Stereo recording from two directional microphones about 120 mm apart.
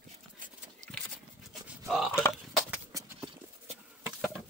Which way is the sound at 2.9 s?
30° right (ahead or behind).